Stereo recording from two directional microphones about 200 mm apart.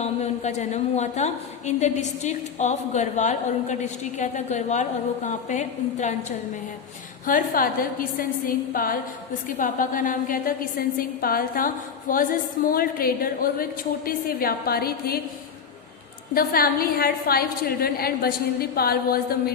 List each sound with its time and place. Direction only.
0.0 s a woman's voice: 35° left (ahead or behind)
7.3 s a woman's voice: 45° left (ahead or behind)
16.3 s a woman's voice: 45° left (ahead or behind)